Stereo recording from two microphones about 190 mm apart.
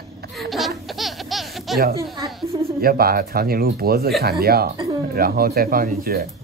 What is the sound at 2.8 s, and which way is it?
Speech, 50° right (ahead or behind).